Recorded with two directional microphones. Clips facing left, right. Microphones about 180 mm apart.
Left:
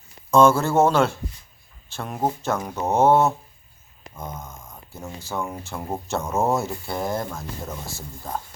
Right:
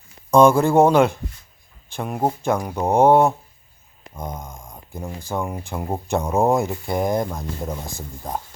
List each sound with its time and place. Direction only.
0.3 s speech: 15° right (ahead or behind)